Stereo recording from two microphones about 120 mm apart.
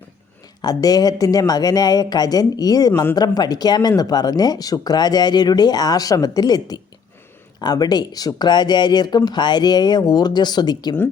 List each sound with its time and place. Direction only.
0.6 s speech: 30° left (ahead or behind)